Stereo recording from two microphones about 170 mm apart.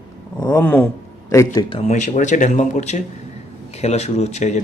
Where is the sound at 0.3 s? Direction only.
20° left (ahead or behind).